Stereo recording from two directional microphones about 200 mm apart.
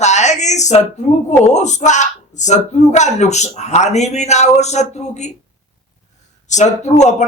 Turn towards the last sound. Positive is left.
turn(degrees=35)  # may be behind; listen again after turning